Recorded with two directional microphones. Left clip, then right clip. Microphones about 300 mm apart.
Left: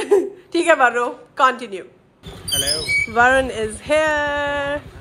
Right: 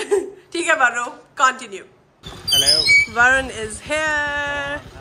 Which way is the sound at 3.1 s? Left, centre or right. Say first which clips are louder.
Left 1 dB; centre.